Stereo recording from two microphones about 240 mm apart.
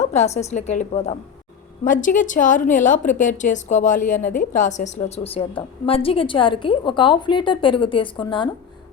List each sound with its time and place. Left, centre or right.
0.0 s a woman's voice: left